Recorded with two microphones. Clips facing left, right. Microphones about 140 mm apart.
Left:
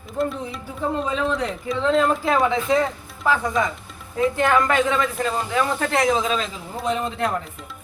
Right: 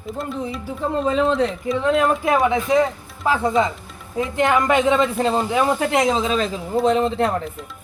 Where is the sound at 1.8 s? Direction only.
15° right (ahead or behind); by 5.4 s 30° right (ahead or behind).